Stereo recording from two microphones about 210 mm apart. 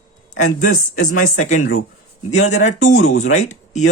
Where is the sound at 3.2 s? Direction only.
35° left (ahead or behind).